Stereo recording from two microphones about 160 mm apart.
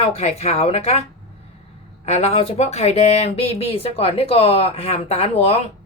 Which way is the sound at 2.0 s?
40° left (ahead or behind).